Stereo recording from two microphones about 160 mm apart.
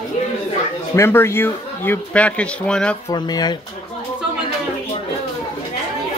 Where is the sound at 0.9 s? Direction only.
15° left (ahead or behind).